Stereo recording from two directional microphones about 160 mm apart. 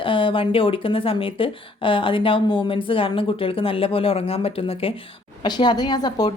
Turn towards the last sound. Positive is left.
turn(degrees=25)  # may be behind; listen again after turning